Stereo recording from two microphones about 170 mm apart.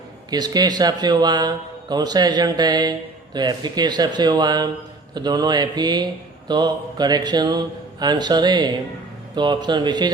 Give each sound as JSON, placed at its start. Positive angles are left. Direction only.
{"t": 0.3, "sound": "speech", "side_deg": -25}